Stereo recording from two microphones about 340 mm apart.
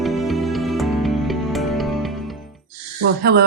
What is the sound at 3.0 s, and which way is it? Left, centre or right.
Speech, right.